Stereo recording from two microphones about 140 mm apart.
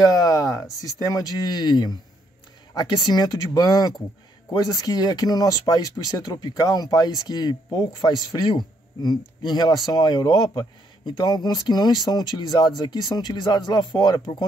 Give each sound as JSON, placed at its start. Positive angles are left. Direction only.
{"t": 0.0, "sound": "speech", "side_deg": 25}